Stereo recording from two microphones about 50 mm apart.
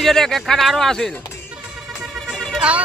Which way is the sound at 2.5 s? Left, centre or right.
Right.